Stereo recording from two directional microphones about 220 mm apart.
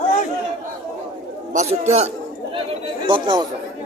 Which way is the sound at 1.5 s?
30° right (ahead or behind).